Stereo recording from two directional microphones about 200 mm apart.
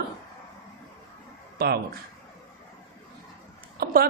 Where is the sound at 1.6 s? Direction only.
50° right (ahead or behind).